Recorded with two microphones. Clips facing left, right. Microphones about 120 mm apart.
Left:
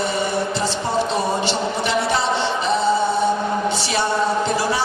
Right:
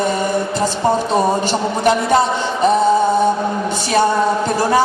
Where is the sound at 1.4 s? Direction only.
45° right (ahead or behind).